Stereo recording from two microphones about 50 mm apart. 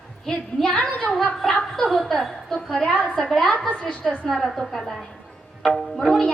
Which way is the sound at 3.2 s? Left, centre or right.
Centre.